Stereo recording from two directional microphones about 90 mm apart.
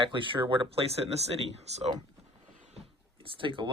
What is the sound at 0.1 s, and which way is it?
Speech, 70° right (ahead or behind).